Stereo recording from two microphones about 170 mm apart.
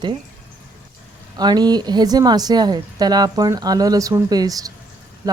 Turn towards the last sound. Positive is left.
turn(degrees=-20)  # may be behind; listen again after turning